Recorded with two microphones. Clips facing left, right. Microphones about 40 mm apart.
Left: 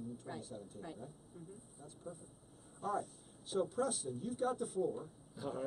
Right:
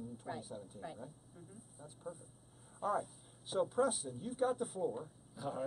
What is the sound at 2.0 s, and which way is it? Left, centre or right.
Speech, right.